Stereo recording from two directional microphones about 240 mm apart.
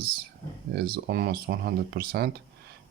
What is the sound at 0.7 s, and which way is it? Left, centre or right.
Speech, right.